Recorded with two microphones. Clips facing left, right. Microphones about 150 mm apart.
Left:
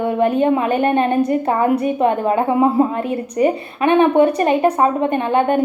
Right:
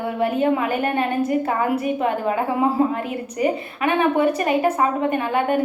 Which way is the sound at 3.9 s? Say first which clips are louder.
Left 6 dB; 25° left (ahead or behind).